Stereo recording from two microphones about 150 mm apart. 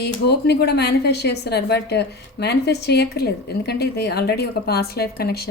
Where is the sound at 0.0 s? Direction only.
90° left.